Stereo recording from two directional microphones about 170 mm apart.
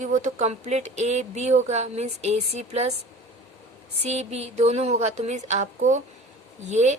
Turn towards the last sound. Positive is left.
turn(degrees=-45)  # may be behind; listen again after turning